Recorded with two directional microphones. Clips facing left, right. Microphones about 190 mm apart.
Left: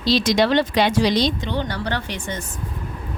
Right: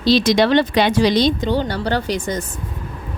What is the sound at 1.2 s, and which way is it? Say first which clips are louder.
Speech: right 5 dB; 55° right (ahead or behind).